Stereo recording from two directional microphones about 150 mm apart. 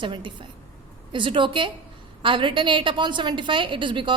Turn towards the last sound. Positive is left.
turn(degrees=-35)  # may be behind; listen again after turning